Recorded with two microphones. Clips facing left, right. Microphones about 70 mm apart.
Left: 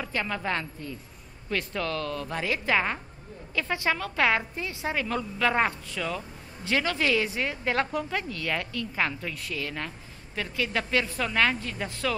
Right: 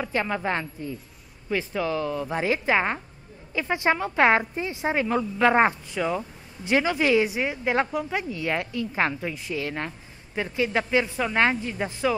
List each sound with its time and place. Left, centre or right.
0.0 s a woman's voice: right